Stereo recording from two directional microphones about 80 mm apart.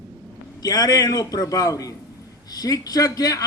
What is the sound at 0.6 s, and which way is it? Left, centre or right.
Speech, left.